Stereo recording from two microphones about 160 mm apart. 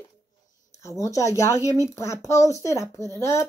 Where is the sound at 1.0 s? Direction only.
20° left (ahead or behind).